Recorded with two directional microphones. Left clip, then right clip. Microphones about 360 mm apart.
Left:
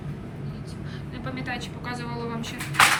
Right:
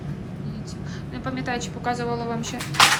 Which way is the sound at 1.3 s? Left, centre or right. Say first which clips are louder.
Right 4 dB; centre.